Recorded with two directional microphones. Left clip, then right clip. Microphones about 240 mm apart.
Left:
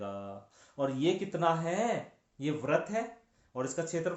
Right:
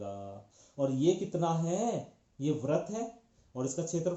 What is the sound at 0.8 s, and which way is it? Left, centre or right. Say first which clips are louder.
Speech: right 1 dB; left.